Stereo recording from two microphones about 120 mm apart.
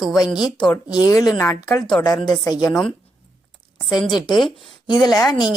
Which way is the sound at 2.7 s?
5° left (ahead or behind).